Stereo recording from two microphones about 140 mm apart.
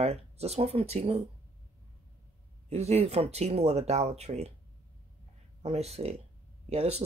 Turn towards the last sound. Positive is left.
turn(degrees=-50)  # may be behind; listen again after turning